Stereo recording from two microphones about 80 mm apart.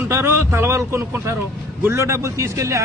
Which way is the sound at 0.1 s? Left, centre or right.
Right.